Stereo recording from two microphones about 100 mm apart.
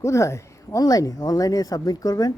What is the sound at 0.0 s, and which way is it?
Speech, 30° left (ahead or behind).